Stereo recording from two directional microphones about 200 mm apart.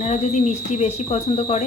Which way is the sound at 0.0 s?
35° left (ahead or behind).